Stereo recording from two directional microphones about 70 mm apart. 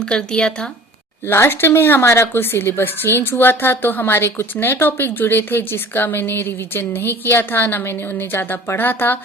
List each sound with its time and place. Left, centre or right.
0.0 s speech: centre
1.3 s speech: left